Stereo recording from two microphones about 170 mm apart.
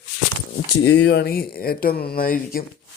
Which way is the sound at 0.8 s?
85° left.